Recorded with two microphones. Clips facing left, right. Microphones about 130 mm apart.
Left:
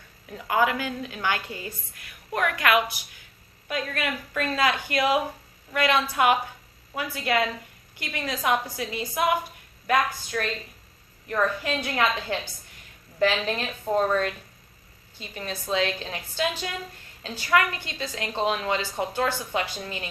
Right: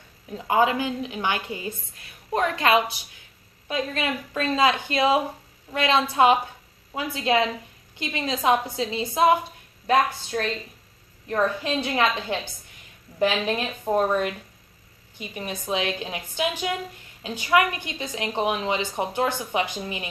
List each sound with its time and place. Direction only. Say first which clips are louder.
0.3 s a woman's voice: right 3 dB; 25° right (ahead or behind)